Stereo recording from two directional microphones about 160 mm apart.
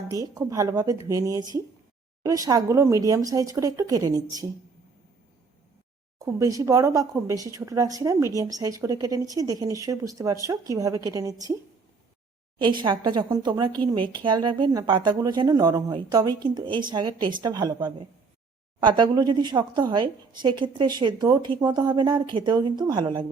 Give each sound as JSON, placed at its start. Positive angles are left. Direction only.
{"t": 0.1, "sound": "a woman's voice", "side_deg": -20}
{"t": 6.1, "sound": "a woman's voice", "side_deg": -20}
{"t": 12.5, "sound": "a woman's voice", "side_deg": -30}